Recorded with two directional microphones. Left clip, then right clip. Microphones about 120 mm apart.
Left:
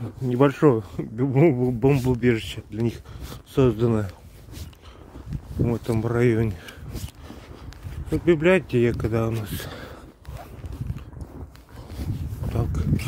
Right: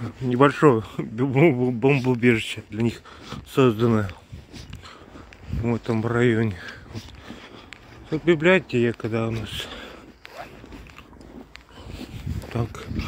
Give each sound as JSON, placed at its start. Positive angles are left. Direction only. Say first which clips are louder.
{"t": 0.0, "sound": "speech", "louder": "right 2 dB", "side_deg": 30}
{"t": 2.0, "sound": "speech", "louder": "right 2 dB", "side_deg": 25}
{"t": 3.3, "sound": "speech", "louder": "right 2 dB", "side_deg": 20}
{"t": 5.7, "sound": "speech", "louder": "right 2 dB", "side_deg": 45}
{"t": 8.6, "sound": "speech", "louder": "left 1 dB", "side_deg": 80}
{"t": 9.4, "sound": "speech", "louder": "right 3 dB", "side_deg": 60}
{"t": 12.4, "sound": "a sound", "louder": "even", "side_deg": 25}